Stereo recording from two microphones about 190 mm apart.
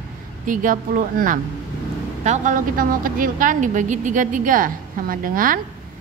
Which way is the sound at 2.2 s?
40° right (ahead or behind).